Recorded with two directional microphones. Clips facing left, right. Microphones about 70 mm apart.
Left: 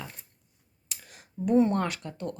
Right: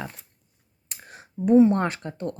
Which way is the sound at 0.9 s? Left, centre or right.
Right.